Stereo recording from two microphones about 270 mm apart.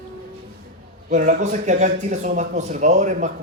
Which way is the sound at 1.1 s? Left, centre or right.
Right.